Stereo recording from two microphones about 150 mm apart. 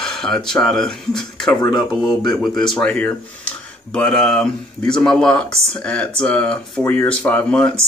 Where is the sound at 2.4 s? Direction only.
5° left (ahead or behind).